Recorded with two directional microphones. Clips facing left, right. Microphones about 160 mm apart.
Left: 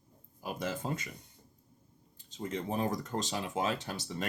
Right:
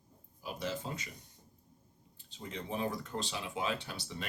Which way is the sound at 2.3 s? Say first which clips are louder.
Left 5 dB; 45° left (ahead or behind).